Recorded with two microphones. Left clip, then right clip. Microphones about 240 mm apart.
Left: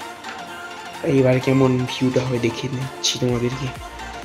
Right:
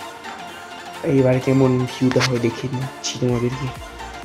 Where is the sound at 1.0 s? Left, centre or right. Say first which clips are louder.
Even; centre.